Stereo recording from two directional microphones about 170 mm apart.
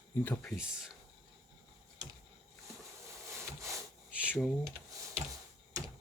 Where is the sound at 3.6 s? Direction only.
20° right (ahead or behind).